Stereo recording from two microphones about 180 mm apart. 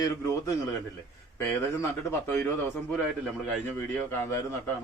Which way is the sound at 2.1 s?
15° left (ahead or behind).